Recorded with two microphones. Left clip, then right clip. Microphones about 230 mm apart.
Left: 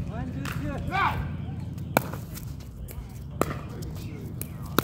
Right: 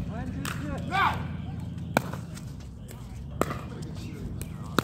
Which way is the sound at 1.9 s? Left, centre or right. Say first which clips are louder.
Left 2 dB; centre.